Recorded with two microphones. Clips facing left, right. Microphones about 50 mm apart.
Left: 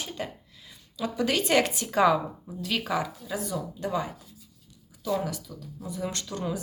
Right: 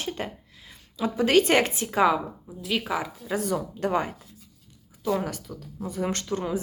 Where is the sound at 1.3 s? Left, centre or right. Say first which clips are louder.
Right 4 dB; right.